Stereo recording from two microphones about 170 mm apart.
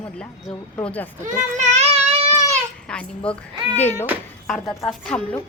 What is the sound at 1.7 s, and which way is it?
Baby cry, 35° right (ahead or behind).